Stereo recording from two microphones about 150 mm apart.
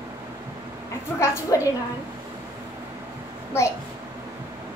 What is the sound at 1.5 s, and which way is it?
Speech, 25° left (ahead or behind).